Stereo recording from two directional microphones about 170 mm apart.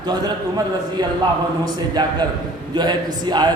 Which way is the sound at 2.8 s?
25° right (ahead or behind).